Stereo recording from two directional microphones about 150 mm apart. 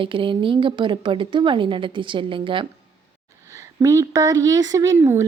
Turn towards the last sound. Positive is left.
turn(degrees=-20)  # may be behind; listen again after turning